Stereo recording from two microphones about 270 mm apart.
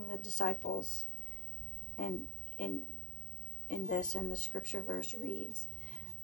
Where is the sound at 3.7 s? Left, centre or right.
Left.